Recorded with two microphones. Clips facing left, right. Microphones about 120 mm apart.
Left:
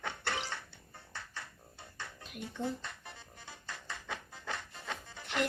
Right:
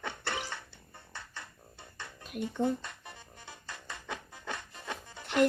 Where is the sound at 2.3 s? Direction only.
50° right (ahead or behind).